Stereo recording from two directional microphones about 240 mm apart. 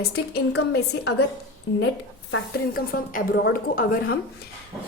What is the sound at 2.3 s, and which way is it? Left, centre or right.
A woman's voice, left.